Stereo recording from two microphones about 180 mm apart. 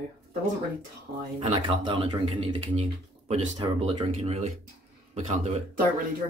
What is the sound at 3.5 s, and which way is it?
Speech, 25° right (ahead or behind).